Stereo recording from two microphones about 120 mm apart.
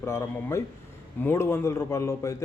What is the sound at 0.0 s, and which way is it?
A man's voice, 20° left (ahead or behind).